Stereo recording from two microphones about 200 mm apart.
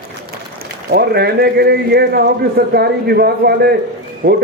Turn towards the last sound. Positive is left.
turn(degrees=-45)  # may be behind; listen again after turning